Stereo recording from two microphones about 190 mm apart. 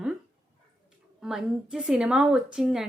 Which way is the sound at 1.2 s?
5° right (ahead or behind).